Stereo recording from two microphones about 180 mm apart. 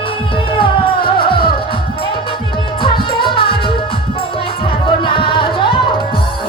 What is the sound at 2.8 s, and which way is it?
Music, 30° left (ahead or behind).